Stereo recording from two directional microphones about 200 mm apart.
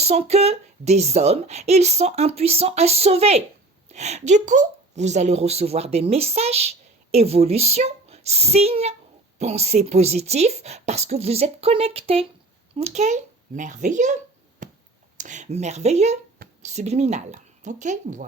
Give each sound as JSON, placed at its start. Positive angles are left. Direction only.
{"t": 0.0, "sound": "a woman's voice", "side_deg": -30}
{"t": 14.6, "sound": "a sound", "side_deg": -40}
{"t": 15.2, "sound": "a woman's voice", "side_deg": -35}